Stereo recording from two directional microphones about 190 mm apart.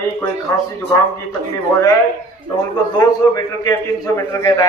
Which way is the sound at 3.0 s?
20° left (ahead or behind).